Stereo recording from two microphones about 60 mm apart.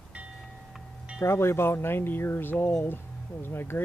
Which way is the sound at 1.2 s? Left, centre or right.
Left.